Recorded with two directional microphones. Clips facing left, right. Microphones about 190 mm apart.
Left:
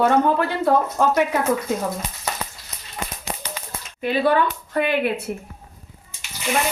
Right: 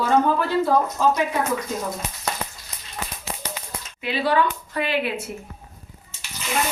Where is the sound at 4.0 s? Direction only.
50° left (ahead or behind).